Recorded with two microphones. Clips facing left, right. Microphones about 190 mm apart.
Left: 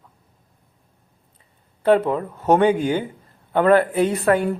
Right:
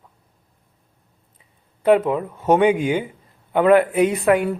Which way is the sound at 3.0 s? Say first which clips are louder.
Even; 5° right (ahead or behind).